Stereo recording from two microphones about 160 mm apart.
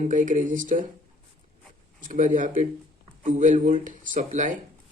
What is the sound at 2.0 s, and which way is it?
Speech, 55° right (ahead or behind).